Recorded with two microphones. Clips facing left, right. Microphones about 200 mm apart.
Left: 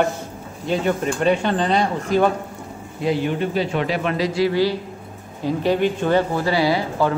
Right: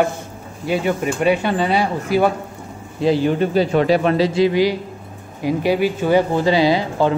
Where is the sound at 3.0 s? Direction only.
35° right (ahead or behind); by 6.2 s 5° right (ahead or behind).